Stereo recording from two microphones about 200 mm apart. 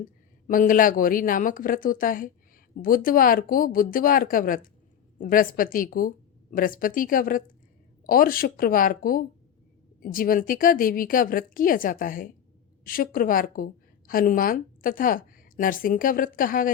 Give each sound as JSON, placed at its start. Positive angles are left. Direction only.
{"t": 0.0, "sound": "a woman's voice", "side_deg": 40}